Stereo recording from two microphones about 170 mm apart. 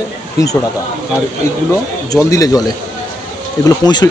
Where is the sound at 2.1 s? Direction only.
20° left (ahead or behind).